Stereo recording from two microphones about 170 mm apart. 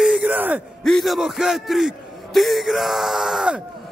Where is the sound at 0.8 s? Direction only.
Centre (ahead or behind).